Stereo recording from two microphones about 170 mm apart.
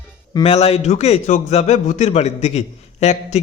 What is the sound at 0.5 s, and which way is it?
A man's voice, 35° left (ahead or behind).